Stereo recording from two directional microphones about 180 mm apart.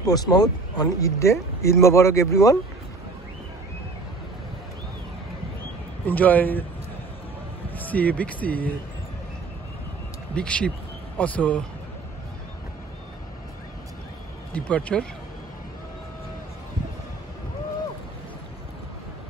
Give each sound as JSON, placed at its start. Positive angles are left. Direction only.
{"t": 0.0, "sound": "speech", "side_deg": 20}
{"t": 6.0, "sound": "speech", "side_deg": 10}
{"t": 7.7, "sound": "speech", "side_deg": 10}
{"t": 10.3, "sound": "speech", "side_deg": 5}
{"t": 14.5, "sound": "speech", "side_deg": 5}